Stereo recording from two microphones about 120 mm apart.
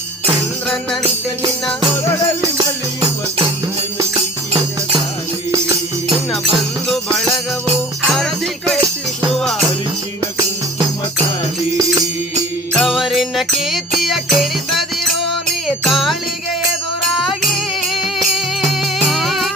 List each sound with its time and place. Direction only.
2.4 s music: 30° right (ahead or behind)
6.8 s music: centre (ahead or behind)
12.7 s mantra: centre (ahead or behind)
13.6 s music: centre (ahead or behind)
17.9 s music: centre (ahead or behind)